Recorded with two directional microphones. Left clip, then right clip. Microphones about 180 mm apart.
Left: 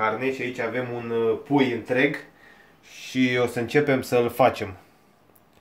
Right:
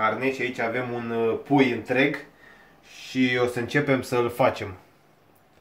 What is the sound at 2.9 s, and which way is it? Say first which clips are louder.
Speech: even; 30° left (ahead or behind).